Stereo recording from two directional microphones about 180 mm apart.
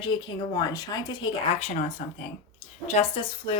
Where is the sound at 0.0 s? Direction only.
25° left (ahead or behind).